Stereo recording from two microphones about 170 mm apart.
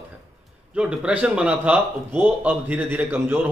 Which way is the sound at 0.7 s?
5° right (ahead or behind).